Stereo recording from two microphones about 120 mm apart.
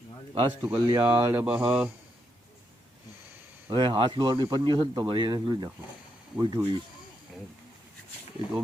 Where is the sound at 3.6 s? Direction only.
40° right (ahead or behind).